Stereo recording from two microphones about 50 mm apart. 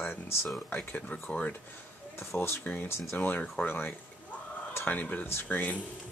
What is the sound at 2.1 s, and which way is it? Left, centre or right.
Speech, left.